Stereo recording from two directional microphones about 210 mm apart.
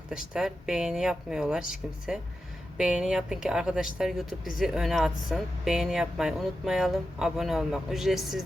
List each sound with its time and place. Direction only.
0.1 s a woman's voice: 5° right (ahead or behind)